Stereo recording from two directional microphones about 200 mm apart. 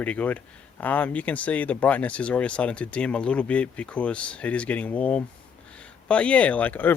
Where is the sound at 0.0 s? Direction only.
5° left (ahead or behind).